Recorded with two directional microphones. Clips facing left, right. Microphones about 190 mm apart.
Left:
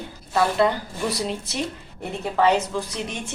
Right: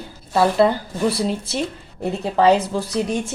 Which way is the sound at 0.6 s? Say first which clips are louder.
Right 4 dB; 30° right (ahead or behind).